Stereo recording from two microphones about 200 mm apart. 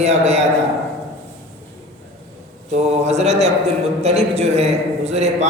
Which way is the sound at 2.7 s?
35° right (ahead or behind).